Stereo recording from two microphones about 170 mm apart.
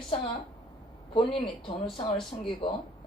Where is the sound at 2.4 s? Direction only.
30° left (ahead or behind).